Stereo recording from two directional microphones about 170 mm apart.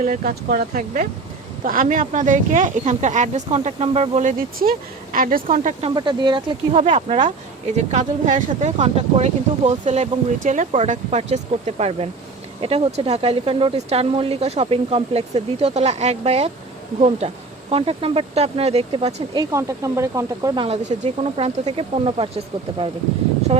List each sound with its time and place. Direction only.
0.0 s speech: 50° right (ahead or behind)
5.9 s speech: 25° right (ahead or behind)
21.0 s speech: 40° right (ahead or behind)